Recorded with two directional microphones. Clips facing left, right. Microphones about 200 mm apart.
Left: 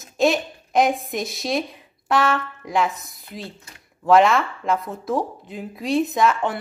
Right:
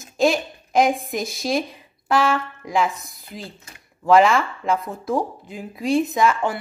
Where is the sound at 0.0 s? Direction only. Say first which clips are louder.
Even; centre (ahead or behind).